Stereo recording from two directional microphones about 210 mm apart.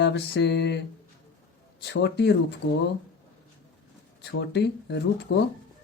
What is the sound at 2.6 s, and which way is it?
Speech, 65° left (ahead or behind).